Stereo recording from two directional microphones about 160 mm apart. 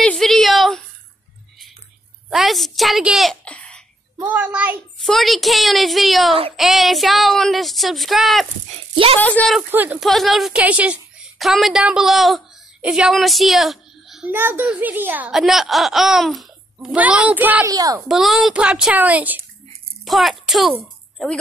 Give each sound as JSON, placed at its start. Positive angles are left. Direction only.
{"t": 0.0, "sound": "a woman's voice", "side_deg": 5}
{"t": 2.2, "sound": "a woman's voice", "side_deg": 0}
{"t": 4.3, "sound": "a woman's voice", "side_deg": -10}
{"t": 8.9, "sound": "a woman's voice", "side_deg": -35}
{"t": 9.2, "sound": "a woman's voice", "side_deg": 10}
{"t": 9.6, "sound": "a woman's voice", "side_deg": -10}
{"t": 9.9, "sound": "a woman's voice", "side_deg": 0}
{"t": 17.6, "sound": "a child's voice", "side_deg": -20}
{"t": 18.0, "sound": "a woman's voice", "side_deg": -5}
{"t": 20.8, "sound": "a sound", "side_deg": 0}